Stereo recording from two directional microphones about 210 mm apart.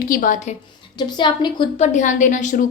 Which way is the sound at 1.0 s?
20° left (ahead or behind).